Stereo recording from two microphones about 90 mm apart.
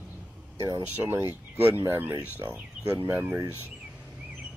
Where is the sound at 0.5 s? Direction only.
45° right (ahead or behind).